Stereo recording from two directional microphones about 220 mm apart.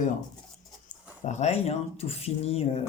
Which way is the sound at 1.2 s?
30° left (ahead or behind).